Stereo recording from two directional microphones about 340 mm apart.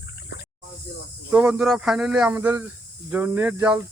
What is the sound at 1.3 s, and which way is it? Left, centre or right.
Speech, centre.